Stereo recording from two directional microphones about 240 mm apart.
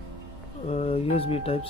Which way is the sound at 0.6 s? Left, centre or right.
Left.